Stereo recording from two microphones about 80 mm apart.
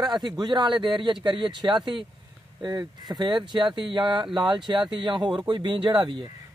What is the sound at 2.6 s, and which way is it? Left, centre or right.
Speech, right.